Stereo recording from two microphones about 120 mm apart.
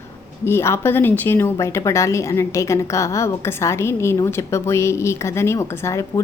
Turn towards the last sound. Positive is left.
turn(degrees=25)  # may be behind; listen again after turning